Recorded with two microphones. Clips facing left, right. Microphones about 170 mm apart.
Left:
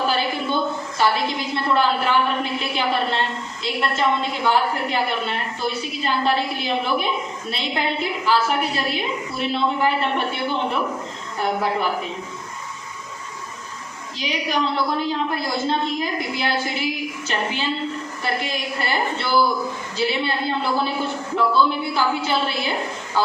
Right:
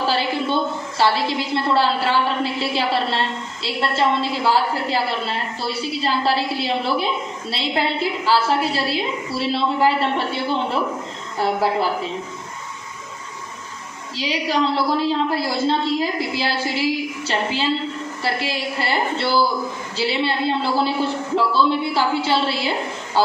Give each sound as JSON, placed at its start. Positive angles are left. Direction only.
{"t": 0.4, "sound": "a woman's voice", "side_deg": -30}
{"t": 14.2, "sound": "a man's voice", "side_deg": -30}